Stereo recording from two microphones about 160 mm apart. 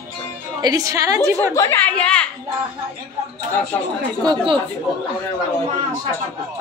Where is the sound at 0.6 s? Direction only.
20° right (ahead or behind).